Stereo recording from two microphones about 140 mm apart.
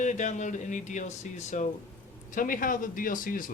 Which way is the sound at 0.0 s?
60° left (ahead or behind).